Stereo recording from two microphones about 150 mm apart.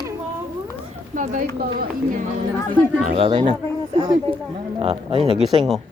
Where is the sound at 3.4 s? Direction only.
40° right (ahead or behind).